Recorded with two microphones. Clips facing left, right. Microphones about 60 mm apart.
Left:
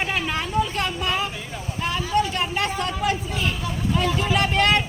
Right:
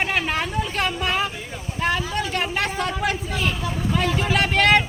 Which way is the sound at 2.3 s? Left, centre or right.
Right.